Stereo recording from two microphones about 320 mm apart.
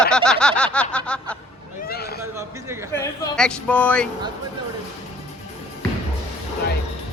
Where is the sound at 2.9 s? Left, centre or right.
Centre.